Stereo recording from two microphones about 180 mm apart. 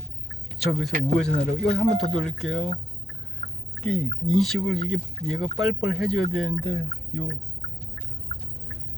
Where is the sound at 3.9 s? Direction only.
5° left (ahead or behind).